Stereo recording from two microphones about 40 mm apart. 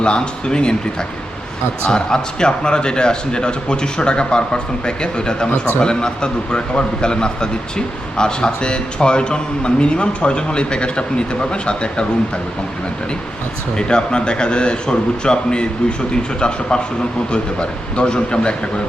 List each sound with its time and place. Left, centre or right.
0.0 s speech: left
1.9 s speech: centre
13.7 s speech: left